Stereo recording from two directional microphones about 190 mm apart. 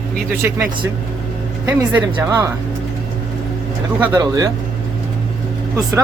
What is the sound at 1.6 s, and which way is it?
Speech, 10° right (ahead or behind).